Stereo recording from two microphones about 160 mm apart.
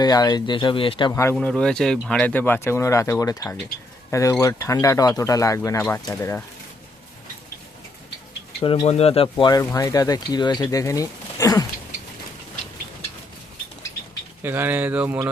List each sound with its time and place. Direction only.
0.0 s speech: 25° left (ahead or behind)
1.1 s speech: 15° left (ahead or behind)
1.4 s speech: 5° left (ahead or behind)
8.6 s speech: 35° left (ahead or behind)
9.3 s speech: 25° left (ahead or behind)
14.4 s speech: 10° right (ahead or behind)